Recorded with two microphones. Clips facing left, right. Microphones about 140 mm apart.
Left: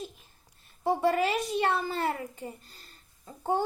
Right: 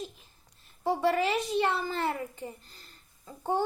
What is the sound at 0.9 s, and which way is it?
A child's voice, 15° left (ahead or behind).